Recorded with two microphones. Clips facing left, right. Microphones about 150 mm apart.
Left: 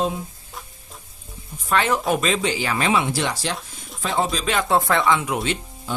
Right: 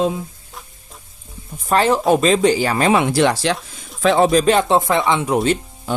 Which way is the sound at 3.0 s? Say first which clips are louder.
Right 8 dB; 65° right (ahead or behind).